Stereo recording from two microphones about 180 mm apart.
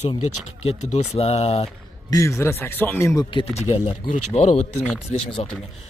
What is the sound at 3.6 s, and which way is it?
Speech, 40° left (ahead or behind).